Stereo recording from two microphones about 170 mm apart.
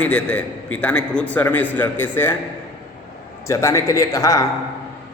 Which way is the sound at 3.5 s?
15° left (ahead or behind).